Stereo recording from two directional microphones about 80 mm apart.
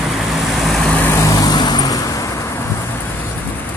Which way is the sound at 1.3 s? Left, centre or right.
Left.